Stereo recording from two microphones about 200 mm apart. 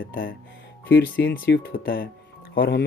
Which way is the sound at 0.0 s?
45° left (ahead or behind).